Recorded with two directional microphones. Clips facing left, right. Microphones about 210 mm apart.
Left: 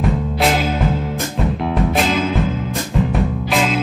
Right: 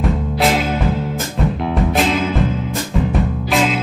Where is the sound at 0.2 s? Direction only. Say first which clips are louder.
Right 1 dB; centre (ahead or behind).